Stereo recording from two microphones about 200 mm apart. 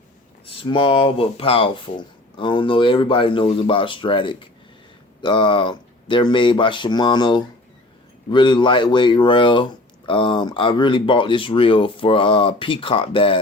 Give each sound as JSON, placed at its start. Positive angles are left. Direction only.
{"t": 0.6, "sound": "speech", "side_deg": 25}